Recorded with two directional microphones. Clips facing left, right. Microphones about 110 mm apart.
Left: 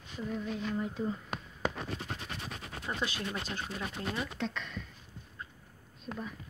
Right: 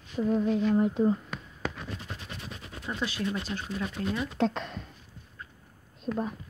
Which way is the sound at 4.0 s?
30° left (ahead or behind).